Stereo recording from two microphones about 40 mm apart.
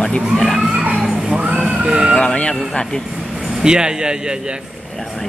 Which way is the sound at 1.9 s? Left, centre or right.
Centre.